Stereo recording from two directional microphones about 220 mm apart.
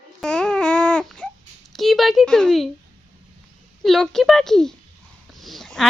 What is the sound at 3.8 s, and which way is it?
Babbling, centre (ahead or behind).